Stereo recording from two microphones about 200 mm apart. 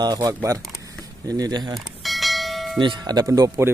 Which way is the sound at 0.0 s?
20° right (ahead or behind).